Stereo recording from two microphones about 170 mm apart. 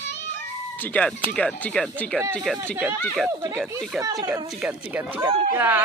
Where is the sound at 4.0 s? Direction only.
20° right (ahead or behind).